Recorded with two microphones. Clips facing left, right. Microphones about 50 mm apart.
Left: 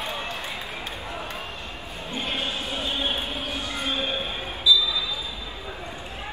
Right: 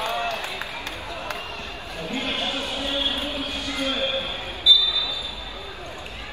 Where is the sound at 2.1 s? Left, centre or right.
Right.